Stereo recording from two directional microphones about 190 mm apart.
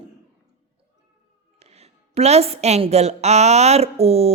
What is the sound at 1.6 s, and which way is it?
A woman's voice, 35° right (ahead or behind).